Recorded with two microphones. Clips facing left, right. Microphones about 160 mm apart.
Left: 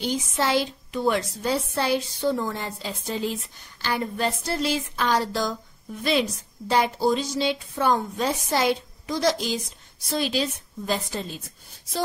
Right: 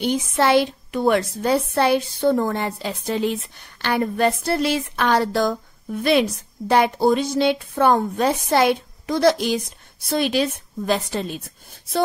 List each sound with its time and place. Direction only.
0.0 s a woman's voice: 60° right (ahead or behind)